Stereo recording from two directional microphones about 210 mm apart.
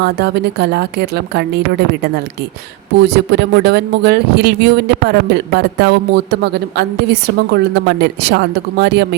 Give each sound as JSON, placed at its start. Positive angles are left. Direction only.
{"t": 0.0, "sound": "speech", "side_deg": -50}
{"t": 3.0, "sound": "speech", "side_deg": -50}